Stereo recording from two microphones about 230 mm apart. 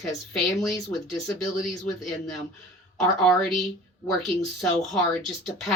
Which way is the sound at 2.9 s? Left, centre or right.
Centre.